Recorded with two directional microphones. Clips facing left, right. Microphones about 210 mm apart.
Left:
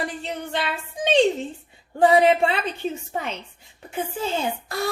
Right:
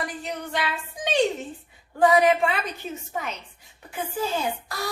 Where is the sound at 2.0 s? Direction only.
30° left (ahead or behind).